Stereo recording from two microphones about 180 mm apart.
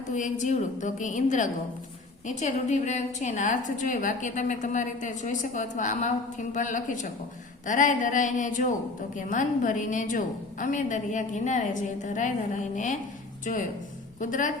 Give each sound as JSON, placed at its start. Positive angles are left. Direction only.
{"t": 0.1, "sound": "a woman's voice", "side_deg": 45}